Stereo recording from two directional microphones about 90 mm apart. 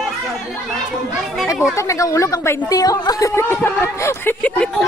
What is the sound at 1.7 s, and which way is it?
A woman's voice, 35° left (ahead or behind).